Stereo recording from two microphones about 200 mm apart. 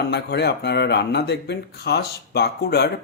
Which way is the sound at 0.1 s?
55° left (ahead or behind).